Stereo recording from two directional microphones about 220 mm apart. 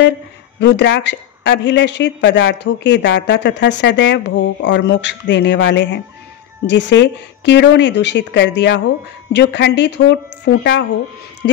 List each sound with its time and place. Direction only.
0.6 s speech: 50° left (ahead or behind)